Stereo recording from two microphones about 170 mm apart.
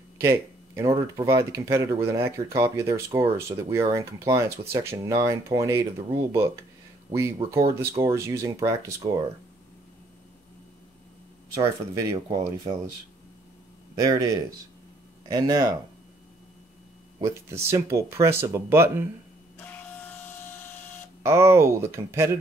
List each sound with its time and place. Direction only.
0.2 s speech: 15° right (ahead or behind)
11.5 s speech: 20° right (ahead or behind)
15.2 s speech: 20° right (ahead or behind)
17.2 s speech: 15° right (ahead or behind)
19.6 s printer: 10° left (ahead or behind)
21.2 s speech: 15° right (ahead or behind)